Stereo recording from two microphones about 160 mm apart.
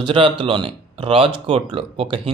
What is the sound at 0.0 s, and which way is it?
Speech, 30° right (ahead or behind).